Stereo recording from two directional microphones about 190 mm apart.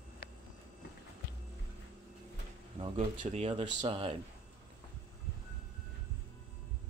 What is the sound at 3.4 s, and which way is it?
Speech, 30° right (ahead or behind).